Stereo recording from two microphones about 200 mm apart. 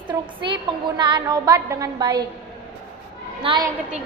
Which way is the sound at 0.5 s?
25° right (ahead or behind).